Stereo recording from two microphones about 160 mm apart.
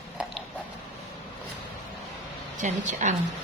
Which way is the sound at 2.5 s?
50° right (ahead or behind).